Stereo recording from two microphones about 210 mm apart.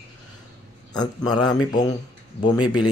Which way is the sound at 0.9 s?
20° left (ahead or behind).